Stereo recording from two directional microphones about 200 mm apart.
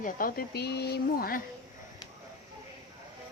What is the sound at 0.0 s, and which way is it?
Speech, 45° left (ahead or behind).